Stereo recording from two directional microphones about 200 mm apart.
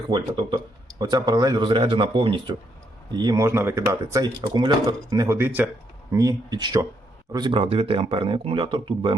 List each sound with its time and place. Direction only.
0.1 s a man's voice: 20° right (ahead or behind)